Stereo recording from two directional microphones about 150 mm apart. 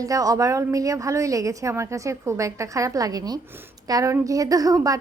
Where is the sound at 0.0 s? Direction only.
25° right (ahead or behind).